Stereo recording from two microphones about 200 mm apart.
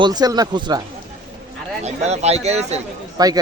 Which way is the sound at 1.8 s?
35° right (ahead or behind).